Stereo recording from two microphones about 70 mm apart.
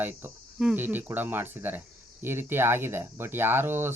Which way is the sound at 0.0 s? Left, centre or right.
Right.